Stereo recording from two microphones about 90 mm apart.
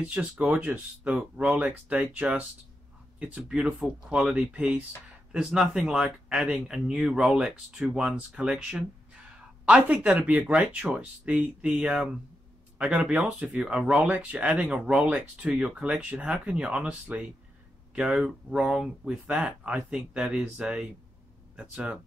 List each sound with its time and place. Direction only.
0.0 s speech: 10° right (ahead or behind)
5.3 s speech: 5° right (ahead or behind)